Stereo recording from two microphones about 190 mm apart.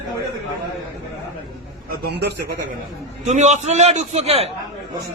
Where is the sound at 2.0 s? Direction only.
60° right (ahead or behind).